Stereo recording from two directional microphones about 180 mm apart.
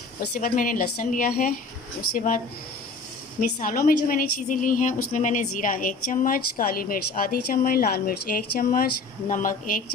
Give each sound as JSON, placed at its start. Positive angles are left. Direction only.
{"t": 0.2, "sound": "a woman's voice", "side_deg": 50}
{"t": 3.6, "sound": "a woman's voice", "side_deg": 50}